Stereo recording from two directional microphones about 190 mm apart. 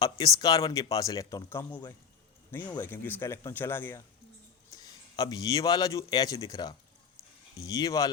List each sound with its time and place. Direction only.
0.3 s a man's voice: 20° left (ahead or behind)